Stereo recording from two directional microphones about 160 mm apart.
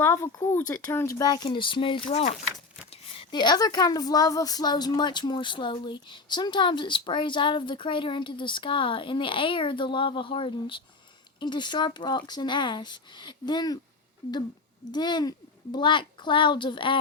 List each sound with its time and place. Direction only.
0.0 s speech: 15° left (ahead or behind)
14.9 s speech: 25° left (ahead or behind)